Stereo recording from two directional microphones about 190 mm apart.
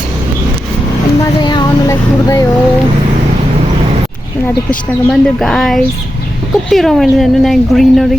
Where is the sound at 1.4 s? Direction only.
20° left (ahead or behind).